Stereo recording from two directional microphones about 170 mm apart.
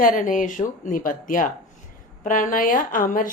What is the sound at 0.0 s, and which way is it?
A woman's voice, 50° left (ahead or behind).